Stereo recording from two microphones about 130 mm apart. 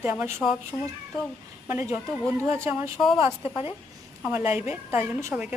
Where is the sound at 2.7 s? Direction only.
Centre (ahead or behind).